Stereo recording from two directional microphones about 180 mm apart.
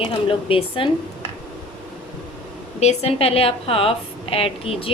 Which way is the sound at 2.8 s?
35° left (ahead or behind).